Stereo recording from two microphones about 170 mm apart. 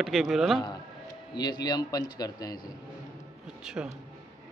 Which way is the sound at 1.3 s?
25° left (ahead or behind).